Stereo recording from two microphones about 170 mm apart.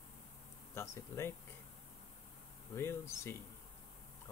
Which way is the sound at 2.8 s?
15° left (ahead or behind).